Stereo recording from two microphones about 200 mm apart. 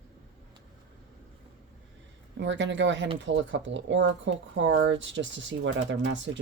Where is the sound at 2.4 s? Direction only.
65° right (ahead or behind).